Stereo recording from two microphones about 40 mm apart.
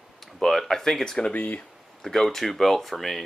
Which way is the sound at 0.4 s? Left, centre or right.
Centre.